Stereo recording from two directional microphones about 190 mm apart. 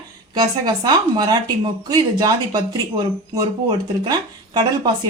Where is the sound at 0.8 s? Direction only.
20° right (ahead or behind).